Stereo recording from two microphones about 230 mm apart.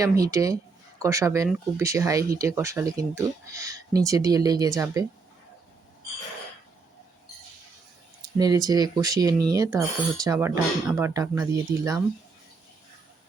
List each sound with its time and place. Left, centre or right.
0.0 s speech: centre
8.4 s speech: centre